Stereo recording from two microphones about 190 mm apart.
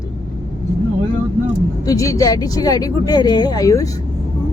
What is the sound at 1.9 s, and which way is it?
A woman's voice, 15° left (ahead or behind).